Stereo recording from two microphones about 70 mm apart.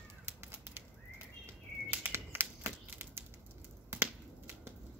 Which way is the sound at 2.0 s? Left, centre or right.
Right.